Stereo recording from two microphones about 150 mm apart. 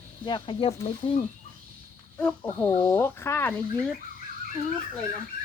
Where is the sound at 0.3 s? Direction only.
35° left (ahead or behind).